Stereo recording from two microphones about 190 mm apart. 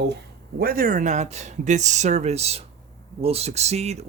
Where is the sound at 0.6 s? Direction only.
50° right (ahead or behind).